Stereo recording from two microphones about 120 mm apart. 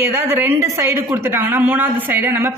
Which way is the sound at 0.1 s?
20° right (ahead or behind).